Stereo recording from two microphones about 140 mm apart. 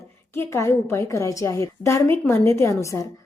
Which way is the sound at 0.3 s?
20° left (ahead or behind).